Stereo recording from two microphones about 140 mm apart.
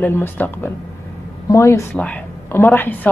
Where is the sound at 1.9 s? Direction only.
10° left (ahead or behind).